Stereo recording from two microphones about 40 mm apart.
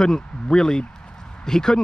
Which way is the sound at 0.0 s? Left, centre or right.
Centre.